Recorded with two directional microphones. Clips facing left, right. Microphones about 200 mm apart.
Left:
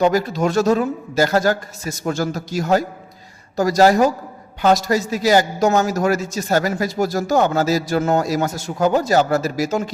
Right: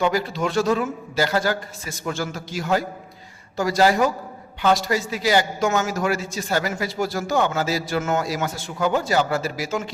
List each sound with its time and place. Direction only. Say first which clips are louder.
0.0 s a man's voice: left 5 dB; 45° left (ahead or behind)